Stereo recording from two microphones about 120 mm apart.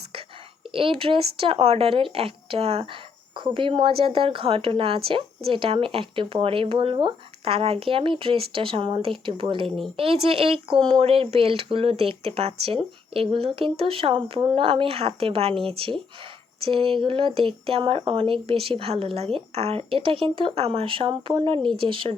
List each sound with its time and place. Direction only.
0.7 s speech: 50° right (ahead or behind)